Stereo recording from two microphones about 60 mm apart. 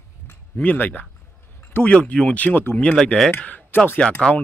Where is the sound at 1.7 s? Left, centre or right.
Left.